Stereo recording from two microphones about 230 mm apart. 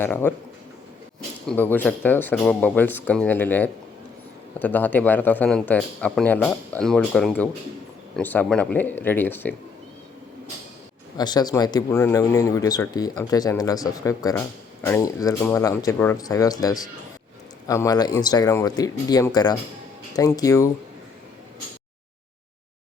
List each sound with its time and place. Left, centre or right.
0.0 s speech: centre
1.5 s speech: centre
11.2 s speech: centre